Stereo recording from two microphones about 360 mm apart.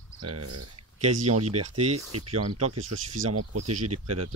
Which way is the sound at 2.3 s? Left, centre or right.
Right.